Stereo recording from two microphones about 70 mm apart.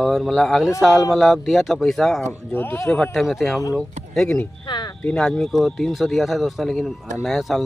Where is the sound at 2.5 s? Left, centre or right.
Left.